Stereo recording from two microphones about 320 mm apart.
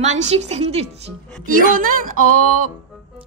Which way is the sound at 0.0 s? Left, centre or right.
Right.